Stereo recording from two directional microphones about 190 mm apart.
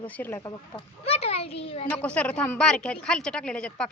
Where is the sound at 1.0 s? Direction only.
30° left (ahead or behind).